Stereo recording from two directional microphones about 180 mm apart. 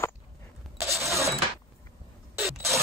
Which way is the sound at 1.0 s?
15° right (ahead or behind).